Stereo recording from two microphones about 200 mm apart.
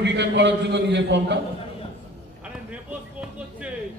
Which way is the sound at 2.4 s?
5° right (ahead or behind).